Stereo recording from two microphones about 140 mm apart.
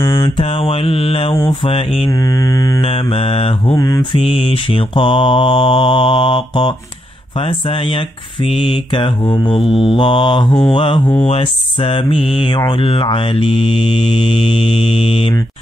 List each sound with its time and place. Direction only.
0.0 s mantra: 25° left (ahead or behind)
0.4 s mantra: 40° left (ahead or behind)
1.3 s mantra: 30° left (ahead or behind)
2.0 s mantra: 25° left (ahead or behind)
2.8 s mantra: 45° left (ahead or behind)
3.7 s mantra: 25° left (ahead or behind); by 15.3 s 45° left (ahead or behind)